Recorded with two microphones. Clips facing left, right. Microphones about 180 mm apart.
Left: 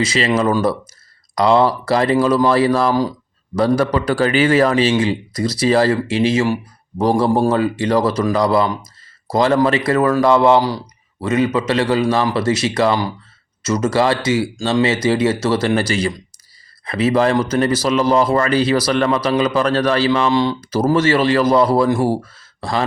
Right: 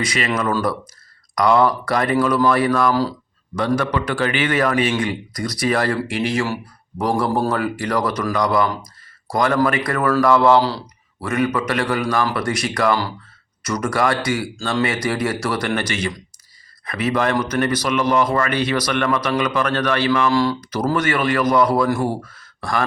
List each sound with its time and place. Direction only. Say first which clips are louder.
0.0 s speech: left 5 dB; 25° left (ahead or behind)